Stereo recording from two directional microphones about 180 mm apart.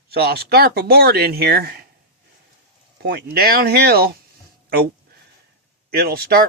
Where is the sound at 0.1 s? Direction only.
60° right (ahead or behind).